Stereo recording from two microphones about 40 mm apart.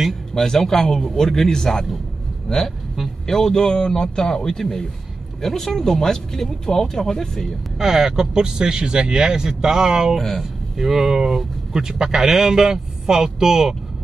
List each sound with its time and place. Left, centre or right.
0.3 s speech: centre
3.3 s speech: centre
7.8 s speech: centre
10.1 s speech: centre
10.8 s speech: centre